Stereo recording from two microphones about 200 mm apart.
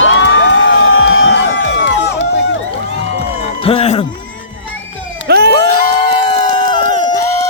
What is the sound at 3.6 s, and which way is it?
Music, 30° left (ahead or behind).